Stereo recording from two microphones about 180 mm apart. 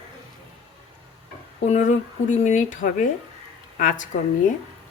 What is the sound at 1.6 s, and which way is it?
A woman's voice, 40° left (ahead or behind).